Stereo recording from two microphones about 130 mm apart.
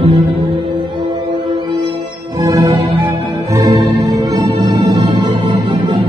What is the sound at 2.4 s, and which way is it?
Music, 25° right (ahead or behind).